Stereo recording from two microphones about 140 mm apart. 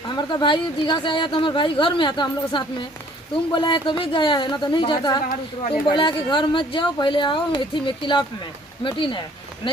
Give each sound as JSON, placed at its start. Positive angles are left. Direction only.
{"t": 0.1, "sound": "speech", "side_deg": 30}